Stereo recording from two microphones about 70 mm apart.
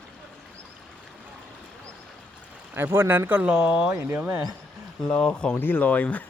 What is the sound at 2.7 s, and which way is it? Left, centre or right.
Speech, right.